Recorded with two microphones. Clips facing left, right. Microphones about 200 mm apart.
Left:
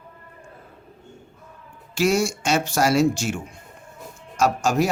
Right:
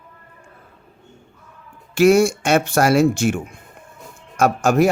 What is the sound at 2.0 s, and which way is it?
Speech, 55° right (ahead or behind).